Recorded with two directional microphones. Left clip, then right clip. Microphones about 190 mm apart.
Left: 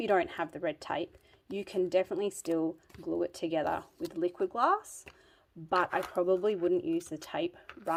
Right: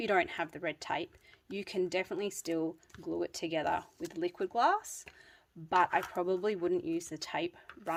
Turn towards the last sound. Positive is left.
turn(degrees=-25)  # may be behind; listen again after turning